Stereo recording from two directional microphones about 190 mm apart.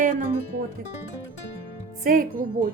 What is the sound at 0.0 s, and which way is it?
Music, 45° right (ahead or behind).